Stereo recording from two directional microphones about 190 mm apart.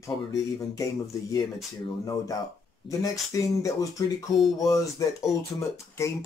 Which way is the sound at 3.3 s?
15° left (ahead or behind).